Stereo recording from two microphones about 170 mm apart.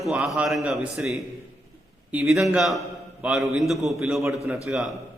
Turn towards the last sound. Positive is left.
turn(degrees=0)  # may be behind; listen again after turning